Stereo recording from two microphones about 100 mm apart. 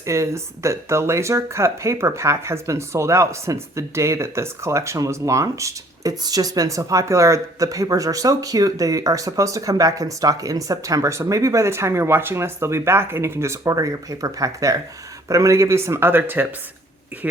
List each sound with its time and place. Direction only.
0.0 s speech: 30° right (ahead or behind)